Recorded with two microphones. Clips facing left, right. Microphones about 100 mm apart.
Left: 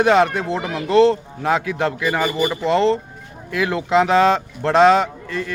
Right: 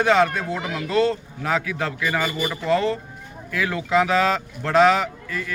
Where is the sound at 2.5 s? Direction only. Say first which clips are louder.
Left 3 dB; 20° left (ahead or behind).